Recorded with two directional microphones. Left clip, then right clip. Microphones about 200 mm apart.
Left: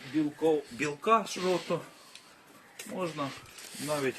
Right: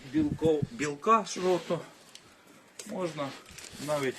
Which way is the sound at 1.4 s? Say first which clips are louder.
Right 2 dB; 40° right (ahead or behind).